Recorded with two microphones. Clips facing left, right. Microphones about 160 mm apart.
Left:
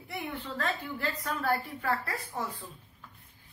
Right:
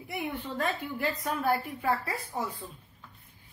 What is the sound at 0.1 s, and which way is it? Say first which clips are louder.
A woman's voice: right 3 dB; 15° right (ahead or behind).